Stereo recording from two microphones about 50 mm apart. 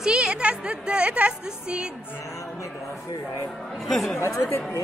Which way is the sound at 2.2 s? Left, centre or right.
Left.